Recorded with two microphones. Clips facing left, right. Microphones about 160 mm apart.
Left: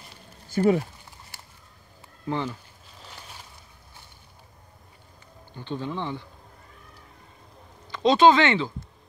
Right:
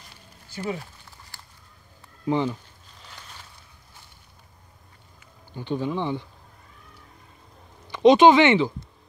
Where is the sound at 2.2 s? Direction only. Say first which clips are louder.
Right 5 dB; 15° right (ahead or behind).